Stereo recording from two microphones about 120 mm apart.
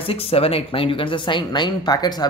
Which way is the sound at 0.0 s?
55° left (ahead or behind).